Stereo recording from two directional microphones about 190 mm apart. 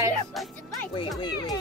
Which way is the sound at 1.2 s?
20° left (ahead or behind).